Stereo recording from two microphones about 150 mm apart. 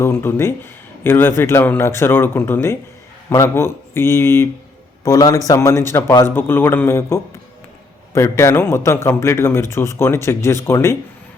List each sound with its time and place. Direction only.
0.0 s a man's voice: 15° left (ahead or behind)